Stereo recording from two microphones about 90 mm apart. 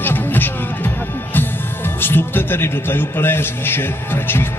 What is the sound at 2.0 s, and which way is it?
A man's voice, 25° left (ahead or behind).